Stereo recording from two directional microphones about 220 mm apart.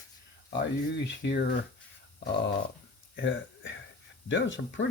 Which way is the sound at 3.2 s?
60° left (ahead or behind).